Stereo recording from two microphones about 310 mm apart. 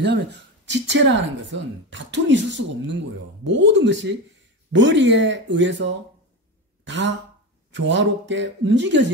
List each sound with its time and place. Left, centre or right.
0.0 s speech: right